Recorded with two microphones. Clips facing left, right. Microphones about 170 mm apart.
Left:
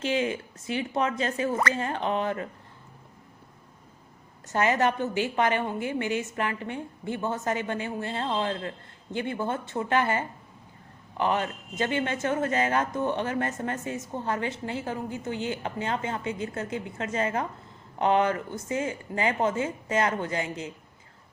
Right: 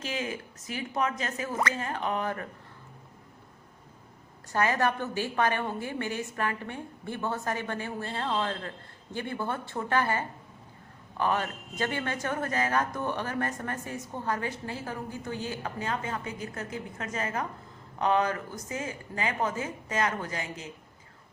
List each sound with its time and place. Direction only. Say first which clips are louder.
0.0 s a woman's voice: left 7 dB; 30° left (ahead or behind)
4.4 s a woman's voice: left 3 dB; 20° left (ahead or behind)